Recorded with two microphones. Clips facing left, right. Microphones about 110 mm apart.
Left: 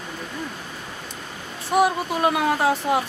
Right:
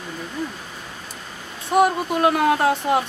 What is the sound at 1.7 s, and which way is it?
Speech, centre (ahead or behind).